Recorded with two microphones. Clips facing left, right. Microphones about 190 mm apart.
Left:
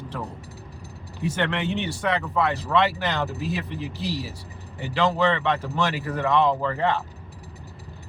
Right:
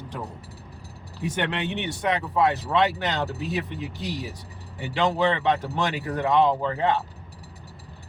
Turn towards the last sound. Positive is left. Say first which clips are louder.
# even
turn(degrees=-20)  # may be behind; listen again after turning